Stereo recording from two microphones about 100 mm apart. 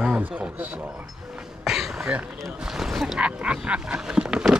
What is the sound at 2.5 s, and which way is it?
Speech, 5° right (ahead or behind).